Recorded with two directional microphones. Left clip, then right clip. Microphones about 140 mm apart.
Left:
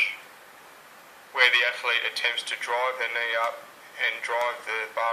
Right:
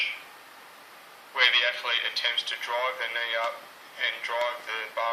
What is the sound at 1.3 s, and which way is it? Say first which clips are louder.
Speech: left 2 dB; 50° left (ahead or behind).